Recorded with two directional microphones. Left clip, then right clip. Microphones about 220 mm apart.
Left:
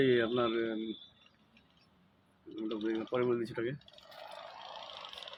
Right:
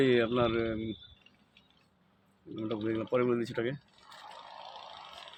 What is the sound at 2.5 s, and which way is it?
Speech, 45° right (ahead or behind).